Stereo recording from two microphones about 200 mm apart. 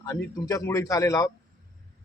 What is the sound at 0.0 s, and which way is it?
A man's voice, 15° left (ahead or behind).